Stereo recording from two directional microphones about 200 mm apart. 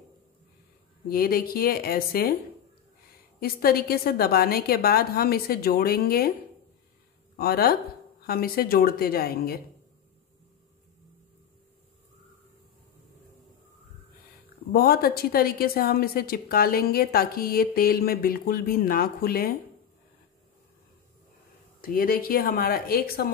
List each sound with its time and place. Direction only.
1.0 s a woman's voice: 50° left (ahead or behind)
3.3 s a woman's voice: 50° left (ahead or behind)
7.3 s a woman's voice: 50° left (ahead or behind)
14.7 s a woman's voice: 50° left (ahead or behind)
21.8 s a woman's voice: 45° left (ahead or behind)